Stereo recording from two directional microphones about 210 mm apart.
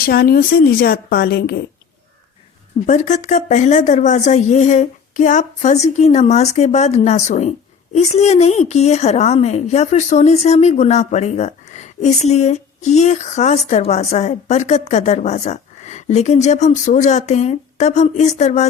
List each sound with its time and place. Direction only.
0.0 s a woman's voice: 45° left (ahead or behind)
2.8 s a woman's voice: 35° left (ahead or behind)